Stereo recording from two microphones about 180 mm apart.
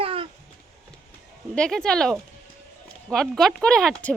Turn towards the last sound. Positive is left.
turn(degrees=5)  # may be behind; listen again after turning